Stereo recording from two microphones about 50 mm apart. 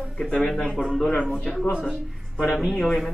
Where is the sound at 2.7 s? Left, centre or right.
Centre.